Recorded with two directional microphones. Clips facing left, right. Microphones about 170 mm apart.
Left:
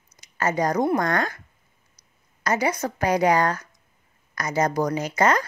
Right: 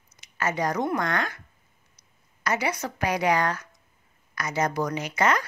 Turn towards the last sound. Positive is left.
turn(degrees=40)  # may be behind; listen again after turning